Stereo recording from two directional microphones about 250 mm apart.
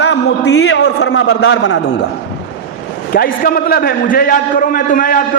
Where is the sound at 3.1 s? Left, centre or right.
Left.